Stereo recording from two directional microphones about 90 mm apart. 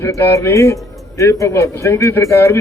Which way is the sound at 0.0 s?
30° left (ahead or behind).